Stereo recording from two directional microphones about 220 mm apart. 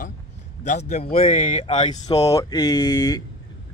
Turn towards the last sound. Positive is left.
turn(degrees=10)  # may be behind; listen again after turning